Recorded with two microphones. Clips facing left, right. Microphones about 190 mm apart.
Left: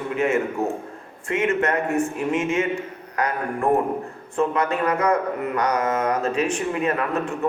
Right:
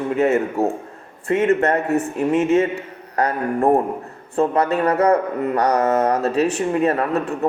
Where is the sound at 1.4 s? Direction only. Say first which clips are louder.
Right 4 dB; 35° right (ahead or behind).